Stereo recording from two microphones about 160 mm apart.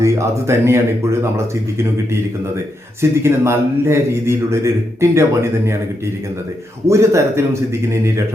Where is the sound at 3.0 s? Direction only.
15° right (ahead or behind).